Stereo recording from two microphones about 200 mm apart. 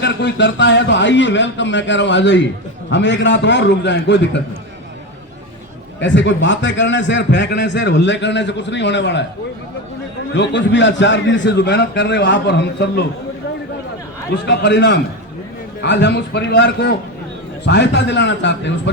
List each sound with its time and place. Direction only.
0.0 s a man's voice: 60° left (ahead or behind)
6.0 s a man's voice: 65° left (ahead or behind)
10.3 s a man's voice: 60° left (ahead or behind)
14.3 s a man's voice: 60° left (ahead or behind)